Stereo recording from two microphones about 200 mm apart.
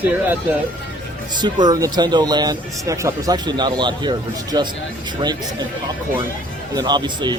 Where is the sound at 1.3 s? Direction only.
20° right (ahead or behind).